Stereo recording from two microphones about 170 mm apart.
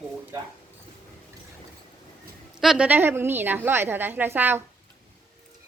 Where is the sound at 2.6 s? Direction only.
5° right (ahead or behind).